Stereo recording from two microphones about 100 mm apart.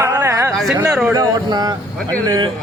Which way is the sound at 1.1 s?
45° right (ahead or behind).